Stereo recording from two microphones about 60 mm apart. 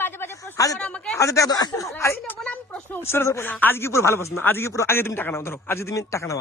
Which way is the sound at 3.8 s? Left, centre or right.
Left.